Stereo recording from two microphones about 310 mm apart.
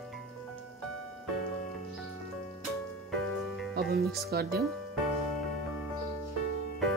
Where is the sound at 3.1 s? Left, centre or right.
Centre.